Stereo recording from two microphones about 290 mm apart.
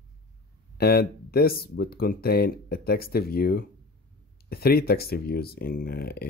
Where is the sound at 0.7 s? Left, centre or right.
Left.